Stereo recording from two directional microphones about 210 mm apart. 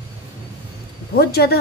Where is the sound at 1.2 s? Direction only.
50° left (ahead or behind).